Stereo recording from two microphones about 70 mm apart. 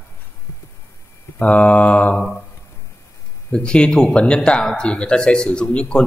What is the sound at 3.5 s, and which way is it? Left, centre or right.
Speech, centre.